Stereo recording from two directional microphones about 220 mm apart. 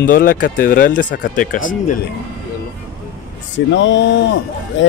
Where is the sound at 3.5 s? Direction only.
55° left (ahead or behind).